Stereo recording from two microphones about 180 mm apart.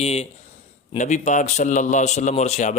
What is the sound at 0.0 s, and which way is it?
Speech, 35° left (ahead or behind).